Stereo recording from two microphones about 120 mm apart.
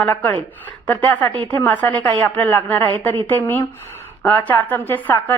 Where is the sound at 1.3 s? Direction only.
45° right (ahead or behind).